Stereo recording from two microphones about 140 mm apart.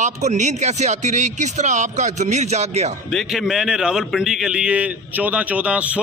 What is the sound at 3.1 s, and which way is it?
A man's voice, centre (ahead or behind).